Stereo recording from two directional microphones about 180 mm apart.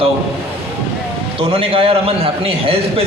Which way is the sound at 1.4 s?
30° right (ahead or behind).